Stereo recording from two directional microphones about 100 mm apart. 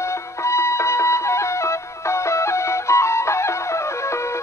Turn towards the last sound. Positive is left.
turn(degrees=30)  # may be behind; listen again after turning